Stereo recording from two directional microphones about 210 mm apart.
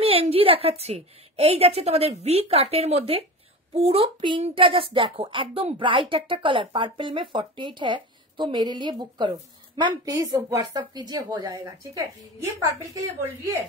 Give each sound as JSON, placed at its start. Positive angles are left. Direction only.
{"t": 0.0, "sound": "a woman's voice", "side_deg": -30}